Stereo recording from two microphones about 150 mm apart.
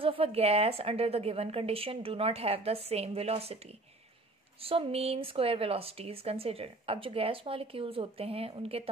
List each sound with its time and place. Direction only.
0.0 s speech: 40° right (ahead or behind)